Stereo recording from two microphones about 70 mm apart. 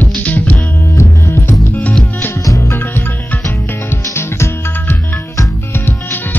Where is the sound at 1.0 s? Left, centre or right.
Left.